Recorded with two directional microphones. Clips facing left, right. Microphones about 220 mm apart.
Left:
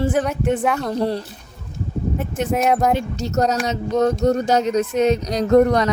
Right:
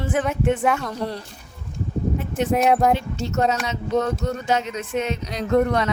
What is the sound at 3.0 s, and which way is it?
Speech, 40° left (ahead or behind).